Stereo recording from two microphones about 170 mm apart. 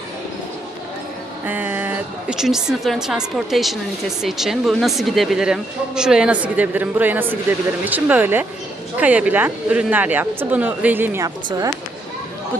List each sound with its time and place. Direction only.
1.5 s speech: 10° right (ahead or behind)